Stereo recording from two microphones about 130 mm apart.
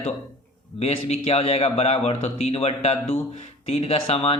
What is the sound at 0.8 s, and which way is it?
A man's voice, 55° left (ahead or behind).